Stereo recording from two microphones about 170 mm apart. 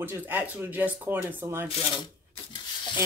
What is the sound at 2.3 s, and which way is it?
Rub, 30° left (ahead or behind).